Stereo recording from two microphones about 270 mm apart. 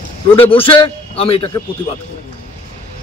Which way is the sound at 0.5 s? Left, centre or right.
Centre.